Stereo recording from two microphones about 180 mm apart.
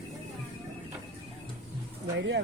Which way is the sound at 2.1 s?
80° right.